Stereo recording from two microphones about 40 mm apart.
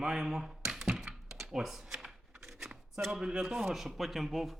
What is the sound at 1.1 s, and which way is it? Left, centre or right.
Computer keyboard, centre.